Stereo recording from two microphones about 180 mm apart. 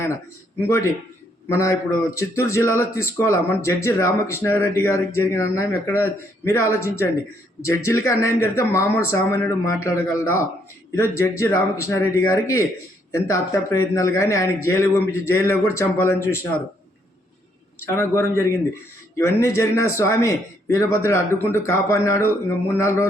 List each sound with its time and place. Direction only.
1.5 s a man's voice: 15° left (ahead or behind)
17.8 s a man's voice: 15° left (ahead or behind)